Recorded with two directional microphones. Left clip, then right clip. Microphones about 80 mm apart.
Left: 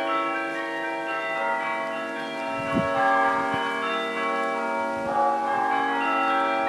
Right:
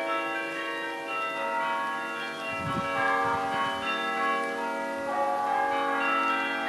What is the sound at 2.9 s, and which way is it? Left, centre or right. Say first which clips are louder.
Church bell: left 5 dB; left.